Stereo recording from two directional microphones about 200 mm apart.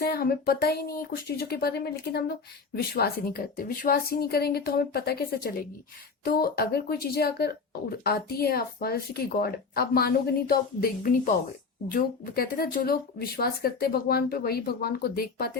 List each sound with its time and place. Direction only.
0.1 s speech: 50° left (ahead or behind)